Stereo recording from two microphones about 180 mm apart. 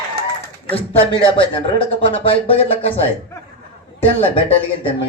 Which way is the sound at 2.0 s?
30° left (ahead or behind).